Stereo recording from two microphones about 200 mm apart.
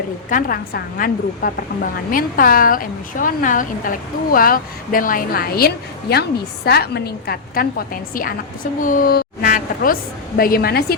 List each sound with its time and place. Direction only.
0.3 s a woman's voice: 45° left (ahead or behind)